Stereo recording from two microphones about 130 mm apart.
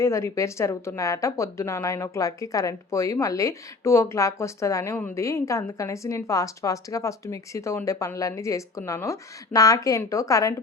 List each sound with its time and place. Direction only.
0.0 s speech: 20° left (ahead or behind)